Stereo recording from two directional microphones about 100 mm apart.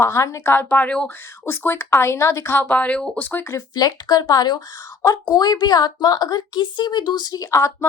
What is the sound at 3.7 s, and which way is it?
A woman's voice, 45° left (ahead or behind).